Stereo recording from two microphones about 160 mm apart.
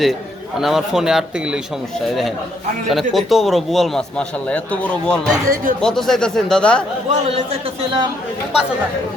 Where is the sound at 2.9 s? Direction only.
Centre (ahead or behind).